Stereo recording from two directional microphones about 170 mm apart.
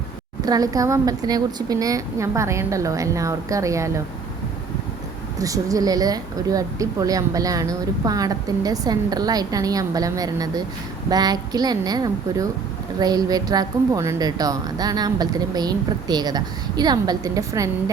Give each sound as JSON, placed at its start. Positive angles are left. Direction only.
{"t": 0.4, "sound": "a woman's voice", "side_deg": -20}
{"t": 5.4, "sound": "a woman's voice", "side_deg": -20}